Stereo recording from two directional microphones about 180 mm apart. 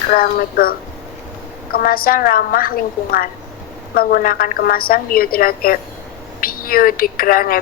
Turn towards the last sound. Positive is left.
turn(degrees=55)  # may be behind; listen again after turning